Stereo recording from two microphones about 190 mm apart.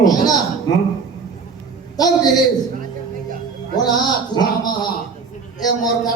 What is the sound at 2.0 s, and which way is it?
Speech, 20° left (ahead or behind).